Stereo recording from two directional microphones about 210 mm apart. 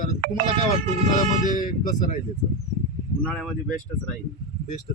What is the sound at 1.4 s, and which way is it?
Speech, 40° left (ahead or behind).